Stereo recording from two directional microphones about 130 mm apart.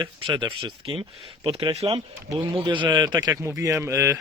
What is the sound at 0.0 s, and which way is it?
Speech, 35° right (ahead or behind).